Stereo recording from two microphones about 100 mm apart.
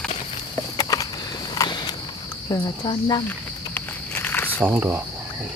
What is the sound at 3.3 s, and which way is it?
Snake, 20° left (ahead or behind).